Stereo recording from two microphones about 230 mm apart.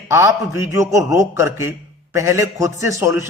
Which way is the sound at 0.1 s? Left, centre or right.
Centre.